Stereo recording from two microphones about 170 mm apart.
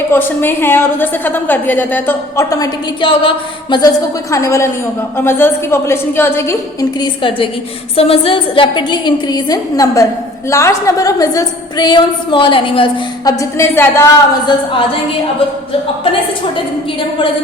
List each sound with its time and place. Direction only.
0.1 s a woman's voice: 10° left (ahead or behind); by 3.8 s 30° left (ahead or behind)
4.3 s a woman's voice: 15° left (ahead or behind)
7.0 s a woman's voice: 30° left (ahead or behind)
13.4 s a woman's voice: 15° left (ahead or behind)
14.4 s a woman's voice: 30° left (ahead or behind)